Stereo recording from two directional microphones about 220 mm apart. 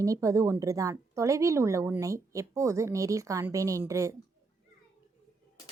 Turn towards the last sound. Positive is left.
turn(degrees=-15)  # may be behind; listen again after turning